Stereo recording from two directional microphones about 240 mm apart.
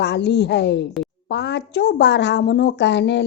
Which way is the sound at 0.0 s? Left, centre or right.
Left.